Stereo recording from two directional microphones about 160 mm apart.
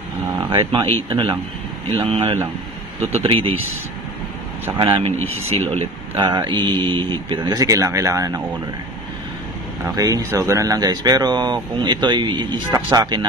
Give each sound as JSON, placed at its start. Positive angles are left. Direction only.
{"t": 0.4, "sound": "speech", "side_deg": -30}
{"t": 3.0, "sound": "speech", "side_deg": -40}
{"t": 4.7, "sound": "speech", "side_deg": -30}
{"t": 9.8, "sound": "speech", "side_deg": -25}